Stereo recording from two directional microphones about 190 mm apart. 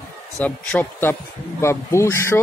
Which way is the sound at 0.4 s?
5° left (ahead or behind).